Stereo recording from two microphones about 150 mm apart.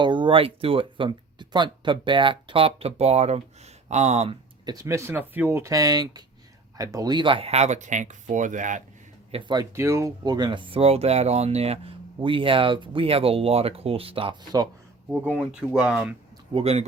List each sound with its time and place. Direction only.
0.0 s speech: 30° right (ahead or behind)
4.6 s speech: 25° right (ahead or behind); by 8.8 s 55° right (ahead or behind)
9.3 s speech: 30° right (ahead or behind)
9.7 s speech: 20° right (ahead or behind)
15.4 s speech: 5° right (ahead or behind)
16.5 s speech: 40° right (ahead or behind)